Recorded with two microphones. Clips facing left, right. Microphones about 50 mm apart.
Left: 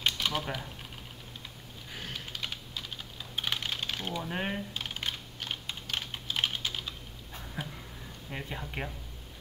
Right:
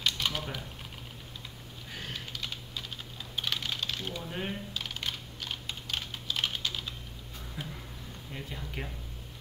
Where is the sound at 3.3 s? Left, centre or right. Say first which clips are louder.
Even; centre.